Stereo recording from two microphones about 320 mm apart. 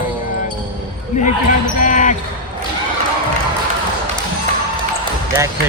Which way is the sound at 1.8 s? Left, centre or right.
Left.